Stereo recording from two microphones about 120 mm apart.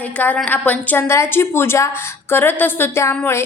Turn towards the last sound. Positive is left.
turn(degrees=20)  # may be behind; listen again after turning